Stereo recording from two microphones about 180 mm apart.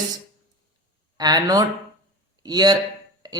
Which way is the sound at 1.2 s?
20° right (ahead or behind).